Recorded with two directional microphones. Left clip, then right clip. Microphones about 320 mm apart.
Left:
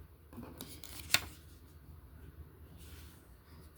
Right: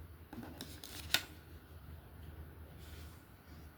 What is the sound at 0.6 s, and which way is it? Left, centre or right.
Scissors, centre.